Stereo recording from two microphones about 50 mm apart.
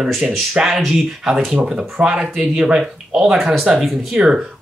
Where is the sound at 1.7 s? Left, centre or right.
Centre.